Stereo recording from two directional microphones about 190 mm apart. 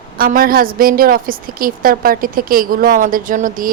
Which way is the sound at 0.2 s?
50° right (ahead or behind).